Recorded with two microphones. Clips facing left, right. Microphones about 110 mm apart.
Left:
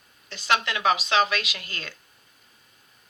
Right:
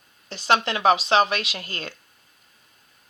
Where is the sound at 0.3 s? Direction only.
30° right (ahead or behind).